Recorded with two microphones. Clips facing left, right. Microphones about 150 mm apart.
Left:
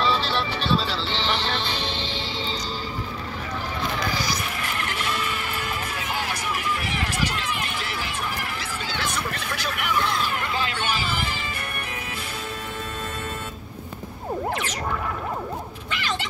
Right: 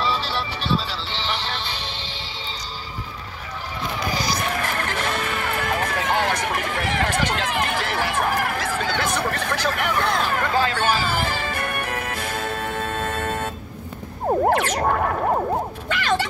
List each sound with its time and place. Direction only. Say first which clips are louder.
0.0 s music: left 1 dB; 10° right (ahead or behind)
1.8 s music: left 4 dB; 25° left (ahead or behind)
4.5 s music: right 5 dB; 50° right (ahead or behind)
14.4 s a sound: right 9 dB; 60° right (ahead or behind)
15.9 s cat: right 7 dB; 55° right (ahead or behind)